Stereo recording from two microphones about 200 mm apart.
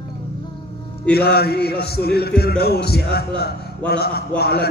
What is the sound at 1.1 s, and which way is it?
A man's voice, 55° left (ahead or behind).